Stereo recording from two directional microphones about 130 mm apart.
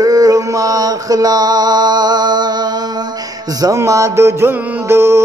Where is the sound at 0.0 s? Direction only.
25° right (ahead or behind).